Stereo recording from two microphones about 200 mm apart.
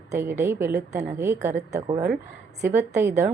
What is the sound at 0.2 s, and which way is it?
Speech, 15° right (ahead or behind).